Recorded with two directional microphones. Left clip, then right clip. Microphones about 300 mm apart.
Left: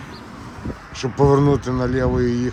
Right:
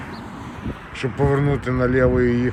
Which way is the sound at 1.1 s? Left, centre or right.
Centre.